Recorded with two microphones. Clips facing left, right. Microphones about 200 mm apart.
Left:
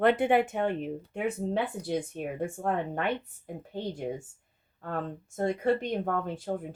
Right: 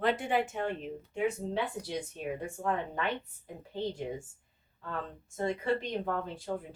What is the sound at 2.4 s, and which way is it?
Speech, 50° left (ahead or behind).